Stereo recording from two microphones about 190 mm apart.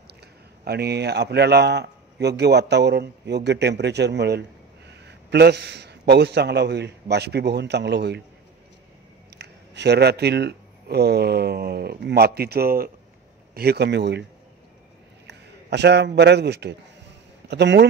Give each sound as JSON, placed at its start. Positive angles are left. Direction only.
{"t": 0.7, "sound": "a man's voice", "side_deg": -60}
{"t": 9.4, "sound": "a man's voice", "side_deg": -60}
{"t": 15.2, "sound": "a man's voice", "side_deg": -65}